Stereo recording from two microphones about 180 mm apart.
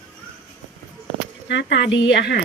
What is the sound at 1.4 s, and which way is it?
Speech, 75° left (ahead or behind).